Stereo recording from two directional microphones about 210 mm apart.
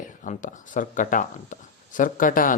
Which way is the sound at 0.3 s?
40° left (ahead or behind).